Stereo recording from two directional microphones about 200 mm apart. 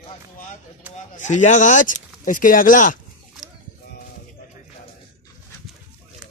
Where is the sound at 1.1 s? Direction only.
35° left (ahead or behind).